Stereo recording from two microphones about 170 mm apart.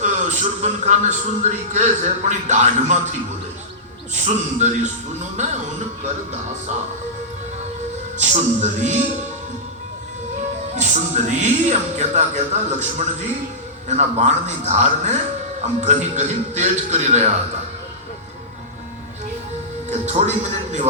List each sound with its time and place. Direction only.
0.0 s speech: 45° right (ahead or behind)
8.2 s speech: 45° right (ahead or behind)
10.8 s speech: 45° right (ahead or behind)
19.9 s a man's voice: 40° right (ahead or behind)